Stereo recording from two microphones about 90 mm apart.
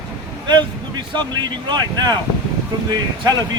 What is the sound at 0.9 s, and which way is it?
Speech, 55° right (ahead or behind).